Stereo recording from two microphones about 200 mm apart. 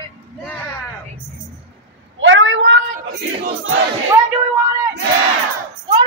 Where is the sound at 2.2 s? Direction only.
70° right (ahead or behind).